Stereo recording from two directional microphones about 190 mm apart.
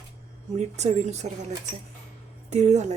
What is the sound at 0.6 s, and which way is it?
Speech, 35° right (ahead or behind).